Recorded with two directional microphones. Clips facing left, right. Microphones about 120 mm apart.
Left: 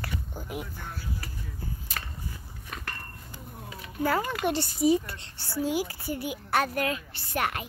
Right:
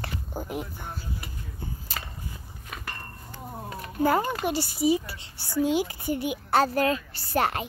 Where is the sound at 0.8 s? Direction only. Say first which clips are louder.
Right 1 dB; 20° right (ahead or behind).